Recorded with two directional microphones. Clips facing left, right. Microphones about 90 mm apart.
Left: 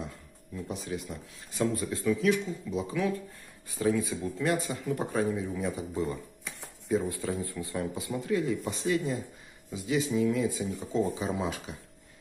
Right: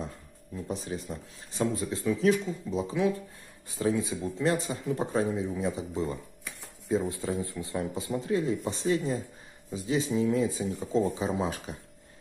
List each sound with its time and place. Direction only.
0.7 s speech: 35° right (ahead or behind)